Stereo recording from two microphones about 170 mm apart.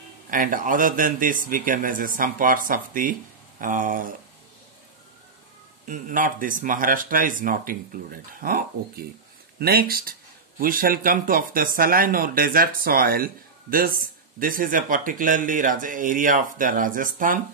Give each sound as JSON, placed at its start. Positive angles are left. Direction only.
{"t": 0.3, "sound": "speech", "side_deg": -50}
{"t": 5.9, "sound": "speech", "side_deg": -50}